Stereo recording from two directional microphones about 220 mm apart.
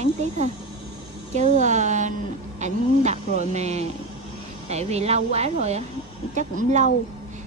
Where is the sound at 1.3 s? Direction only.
30° right (ahead or behind).